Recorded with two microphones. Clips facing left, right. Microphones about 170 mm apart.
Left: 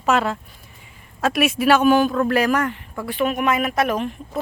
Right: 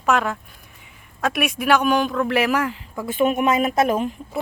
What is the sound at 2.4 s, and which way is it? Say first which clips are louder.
Speech: right 1 dB; 5° right (ahead or behind).